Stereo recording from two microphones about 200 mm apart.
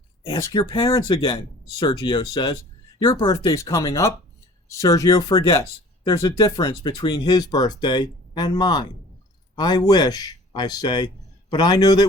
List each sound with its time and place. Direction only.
0.3 s speech: 20° left (ahead or behind)